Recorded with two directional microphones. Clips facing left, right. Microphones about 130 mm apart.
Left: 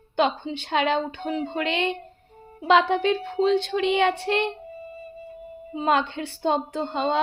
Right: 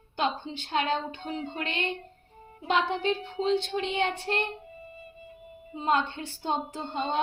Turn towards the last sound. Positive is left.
turn(degrees=90)